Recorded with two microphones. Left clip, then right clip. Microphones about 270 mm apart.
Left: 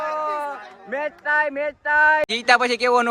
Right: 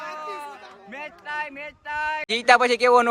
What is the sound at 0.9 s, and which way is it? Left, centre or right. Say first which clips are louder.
Speech: left 11 dB; left.